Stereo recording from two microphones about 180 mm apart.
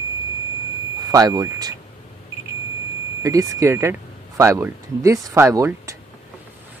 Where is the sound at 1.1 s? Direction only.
20° right (ahead or behind).